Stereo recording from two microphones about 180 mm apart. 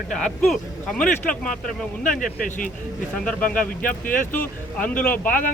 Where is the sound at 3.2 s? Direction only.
5° left (ahead or behind).